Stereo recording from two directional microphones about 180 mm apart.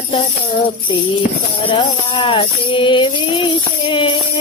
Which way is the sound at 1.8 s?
30° left (ahead or behind).